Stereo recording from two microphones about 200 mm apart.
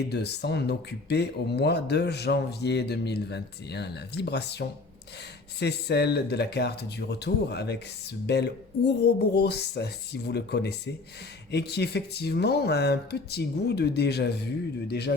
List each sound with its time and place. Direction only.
0.1 s speech: 55° left (ahead or behind)